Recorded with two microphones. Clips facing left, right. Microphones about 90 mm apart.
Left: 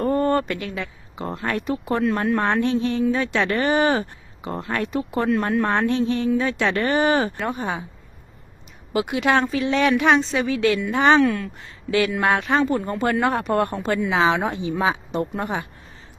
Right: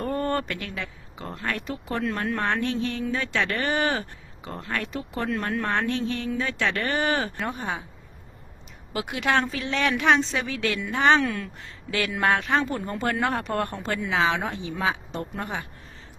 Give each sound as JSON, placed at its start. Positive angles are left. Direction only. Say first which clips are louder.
{"t": 0.1, "sound": "a sound", "louder": "left 5 dB", "side_deg": 10}
{"t": 1.4, "sound": "speech", "louder": "left 5 dB", "side_deg": 20}
{"t": 7.3, "sound": "speech", "louder": "left 4 dB", "side_deg": 5}
{"t": 8.9, "sound": "speech", "louder": "left 5 dB", "side_deg": 5}